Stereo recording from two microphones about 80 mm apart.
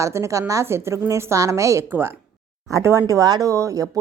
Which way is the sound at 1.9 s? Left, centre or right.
Right.